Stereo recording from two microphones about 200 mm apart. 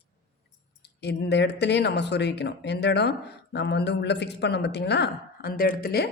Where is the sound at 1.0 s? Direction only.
55° left (ahead or behind).